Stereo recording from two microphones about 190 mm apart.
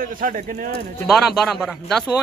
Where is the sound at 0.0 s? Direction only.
45° right (ahead or behind).